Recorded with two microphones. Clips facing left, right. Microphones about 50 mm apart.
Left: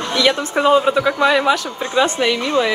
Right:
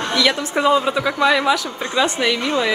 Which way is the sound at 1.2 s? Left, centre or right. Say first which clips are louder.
Even; left.